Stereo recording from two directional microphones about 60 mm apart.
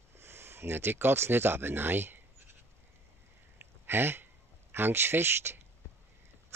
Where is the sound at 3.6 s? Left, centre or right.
Right.